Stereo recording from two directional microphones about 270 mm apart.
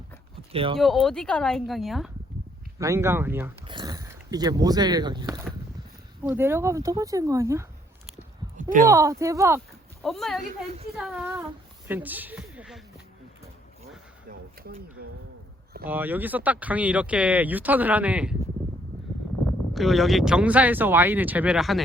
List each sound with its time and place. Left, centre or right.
0.5 s speech: centre
0.8 s speech: centre
2.7 s speech: centre
8.9 s speech: centre
10.0 s speech: centre
11.9 s a sound: centre
15.0 s speech: right
15.9 s speech: centre
19.7 s speech: centre